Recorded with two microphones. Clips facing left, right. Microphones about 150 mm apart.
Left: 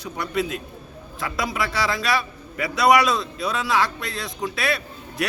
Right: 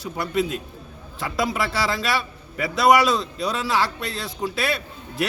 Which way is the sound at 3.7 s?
30° right (ahead or behind).